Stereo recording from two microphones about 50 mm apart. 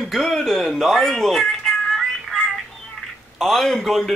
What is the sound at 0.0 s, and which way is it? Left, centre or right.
Music, centre.